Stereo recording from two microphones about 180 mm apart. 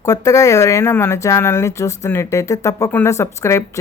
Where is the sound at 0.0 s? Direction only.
20° left (ahead or behind).